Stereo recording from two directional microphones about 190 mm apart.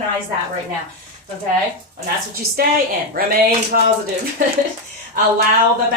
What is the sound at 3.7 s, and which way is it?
Speech, 50° right (ahead or behind).